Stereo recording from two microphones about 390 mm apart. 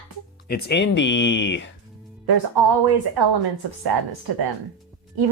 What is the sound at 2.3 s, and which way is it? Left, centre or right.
A woman's voice, right.